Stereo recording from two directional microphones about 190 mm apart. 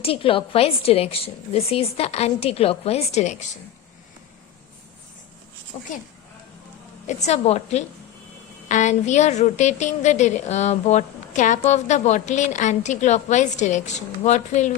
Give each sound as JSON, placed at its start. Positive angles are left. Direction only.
{"t": 0.0, "sound": "a woman's voice", "side_deg": 30}
{"t": 7.1, "sound": "a woman's voice", "side_deg": 35}